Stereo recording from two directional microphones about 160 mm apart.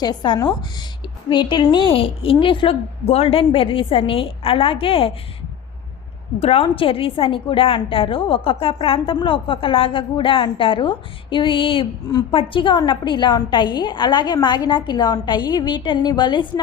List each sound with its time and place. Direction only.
0.0 s a woman's voice: 25° left (ahead or behind)
6.4 s a woman's voice: 35° left (ahead or behind)